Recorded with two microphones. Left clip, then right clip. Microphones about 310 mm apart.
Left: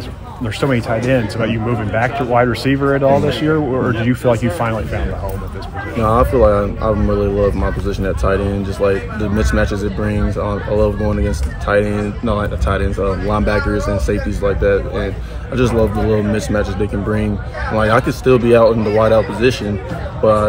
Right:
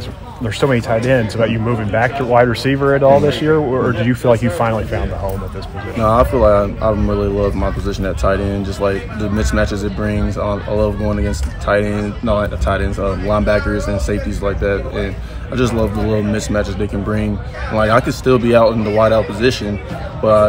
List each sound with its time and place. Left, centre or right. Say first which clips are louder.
0.6 s speech: right 2 dB; right
5.9 s speech: even; centre